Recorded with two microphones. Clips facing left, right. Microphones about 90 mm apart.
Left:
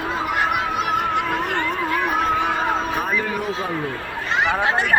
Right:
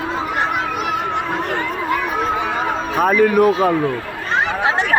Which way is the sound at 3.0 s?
70° right (ahead or behind).